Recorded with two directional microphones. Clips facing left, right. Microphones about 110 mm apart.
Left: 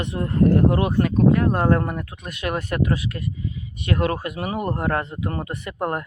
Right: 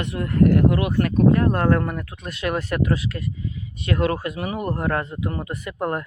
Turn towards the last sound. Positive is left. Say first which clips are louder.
# even
turn(degrees=25)  # may be behind; listen again after turning